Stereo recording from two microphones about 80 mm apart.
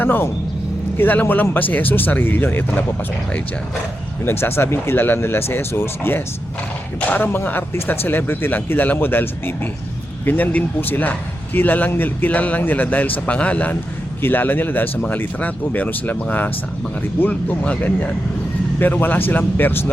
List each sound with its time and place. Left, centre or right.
0.0 s speech: left
4.3 s speech: left
17.2 s speech: centre